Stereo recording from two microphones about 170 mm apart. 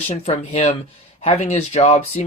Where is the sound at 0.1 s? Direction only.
40° left (ahead or behind).